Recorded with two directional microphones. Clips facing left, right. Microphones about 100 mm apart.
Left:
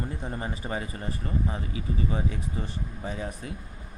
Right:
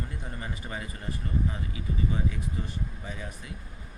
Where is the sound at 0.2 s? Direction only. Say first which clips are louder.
Left 5 dB; 30° left (ahead or behind).